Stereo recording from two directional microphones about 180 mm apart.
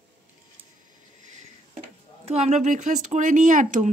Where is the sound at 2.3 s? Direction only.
40° right (ahead or behind).